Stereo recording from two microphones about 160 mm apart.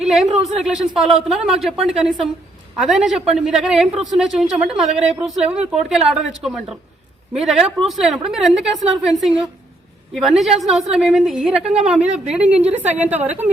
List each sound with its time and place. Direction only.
0.0 s speech: centre (ahead or behind)
0.3 s a woman's voice: 40° right (ahead or behind)
0.6 s a woman's voice: 5° right (ahead or behind)
11.6 s a woman's voice: 40° right (ahead or behind)
11.9 s a woman's voice: 5° right (ahead or behind)